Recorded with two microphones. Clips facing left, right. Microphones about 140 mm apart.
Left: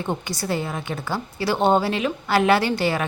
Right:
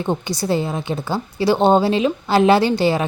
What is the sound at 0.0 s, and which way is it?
A woman's voice, 25° right (ahead or behind).